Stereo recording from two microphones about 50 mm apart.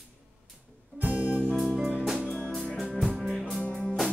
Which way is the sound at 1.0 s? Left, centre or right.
Right.